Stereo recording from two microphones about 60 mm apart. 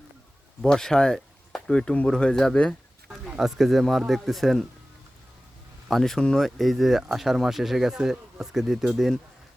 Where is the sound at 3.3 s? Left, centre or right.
Centre.